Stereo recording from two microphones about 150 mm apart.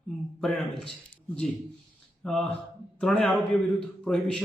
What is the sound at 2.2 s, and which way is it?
Speech, 5° left (ahead or behind).